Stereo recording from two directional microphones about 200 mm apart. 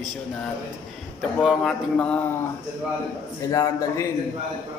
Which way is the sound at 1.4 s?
Centre (ahead or behind).